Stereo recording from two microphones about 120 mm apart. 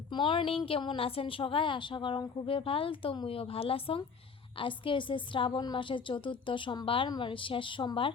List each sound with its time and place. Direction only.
0.1 s a woman's voice: 40° left (ahead or behind)